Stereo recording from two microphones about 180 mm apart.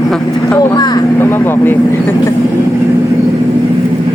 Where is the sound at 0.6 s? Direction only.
20° left (ahead or behind).